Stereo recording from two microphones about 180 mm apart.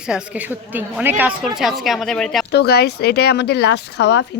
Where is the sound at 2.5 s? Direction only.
65° left (ahead or behind).